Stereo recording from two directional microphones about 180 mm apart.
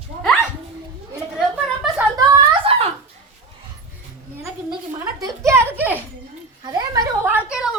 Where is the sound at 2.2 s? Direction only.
30° right (ahead or behind).